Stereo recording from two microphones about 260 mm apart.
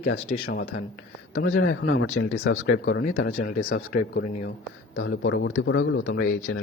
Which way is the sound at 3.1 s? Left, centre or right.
Left.